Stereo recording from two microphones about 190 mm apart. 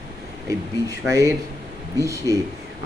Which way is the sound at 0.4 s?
15° right (ahead or behind).